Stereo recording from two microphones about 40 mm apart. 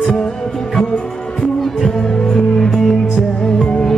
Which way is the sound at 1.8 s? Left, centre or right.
Centre.